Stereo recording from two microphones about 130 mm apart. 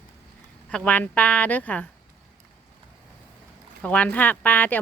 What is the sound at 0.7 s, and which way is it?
Speech, 10° left (ahead or behind).